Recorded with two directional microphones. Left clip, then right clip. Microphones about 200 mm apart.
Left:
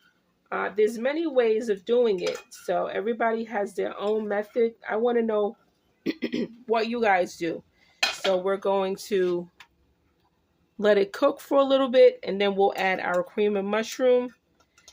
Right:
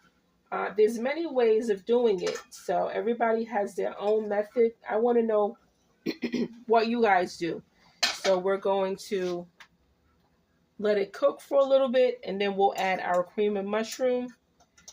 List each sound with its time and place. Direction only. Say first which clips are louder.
0.4 s speech: left 1 dB; 25° left (ahead or behind)
9.0 s speech: left 6 dB; 45° left (ahead or behind)
10.8 s speech: left 5 dB; 45° left (ahead or behind)